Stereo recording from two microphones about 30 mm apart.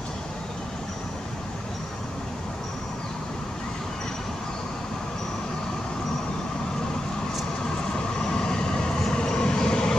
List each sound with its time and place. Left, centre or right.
8.2 s vehicle: left